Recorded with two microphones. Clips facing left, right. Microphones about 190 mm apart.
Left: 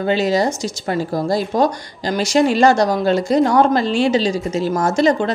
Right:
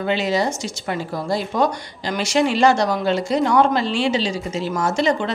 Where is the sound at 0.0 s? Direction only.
40° left (ahead or behind).